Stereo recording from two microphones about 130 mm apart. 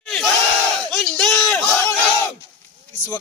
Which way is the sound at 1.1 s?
5° left (ahead or behind).